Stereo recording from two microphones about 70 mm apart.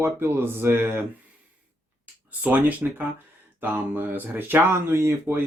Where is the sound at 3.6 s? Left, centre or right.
Right.